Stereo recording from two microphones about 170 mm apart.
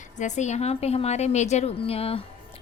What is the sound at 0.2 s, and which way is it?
A woman's voice, 45° left (ahead or behind).